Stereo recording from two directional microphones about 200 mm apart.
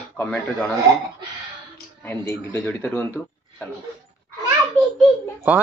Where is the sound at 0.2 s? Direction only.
10° left (ahead or behind).